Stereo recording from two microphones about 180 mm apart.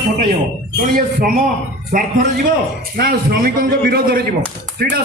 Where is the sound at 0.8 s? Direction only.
55° right (ahead or behind).